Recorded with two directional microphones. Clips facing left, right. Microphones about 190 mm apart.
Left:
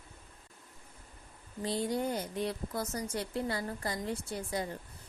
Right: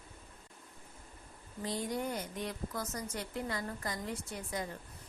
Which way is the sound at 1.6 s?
30° left (ahead or behind).